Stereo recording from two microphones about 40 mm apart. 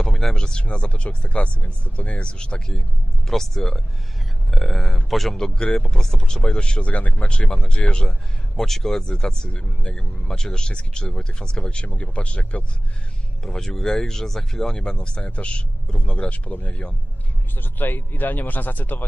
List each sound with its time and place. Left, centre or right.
0.3 s speech: left
3.3 s speech: centre
5.5 s speech: left
6.8 s speech: left
7.2 s speech: left
8.5 s speech: centre
9.0 s speech: centre
11.8 s speech: left
13.4 s speech: centre
16.4 s speech: left
17.6 s a man's voice: left